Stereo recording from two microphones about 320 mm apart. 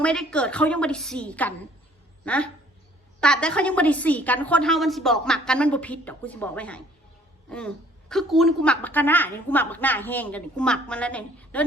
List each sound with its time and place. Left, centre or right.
0.0 s a woman's voice: centre
8.1 s a woman's voice: centre